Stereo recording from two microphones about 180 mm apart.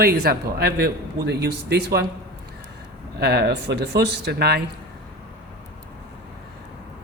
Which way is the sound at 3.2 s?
65° right (ahead or behind).